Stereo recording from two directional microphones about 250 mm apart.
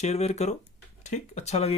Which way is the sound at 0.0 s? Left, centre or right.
Left.